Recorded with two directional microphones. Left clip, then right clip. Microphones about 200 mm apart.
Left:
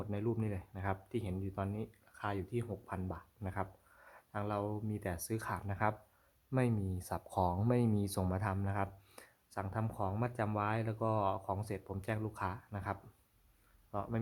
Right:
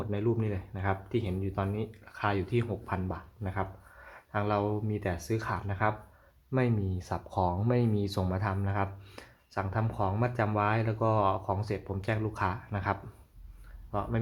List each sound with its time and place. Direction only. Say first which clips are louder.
0.0 s speech: right 7 dB; 25° left (ahead or behind)
3.4 s speech: right 6 dB; 25° left (ahead or behind)
13.9 s speech: right 7 dB; 25° left (ahead or behind)